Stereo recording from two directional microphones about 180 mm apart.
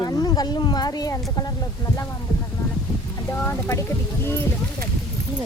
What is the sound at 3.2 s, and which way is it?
Speech, 15° left (ahead or behind).